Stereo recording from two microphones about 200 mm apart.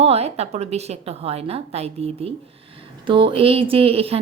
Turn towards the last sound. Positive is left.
turn(degrees=-30)  # may be behind; listen again after turning